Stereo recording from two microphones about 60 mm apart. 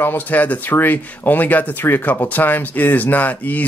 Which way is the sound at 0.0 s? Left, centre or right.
Left.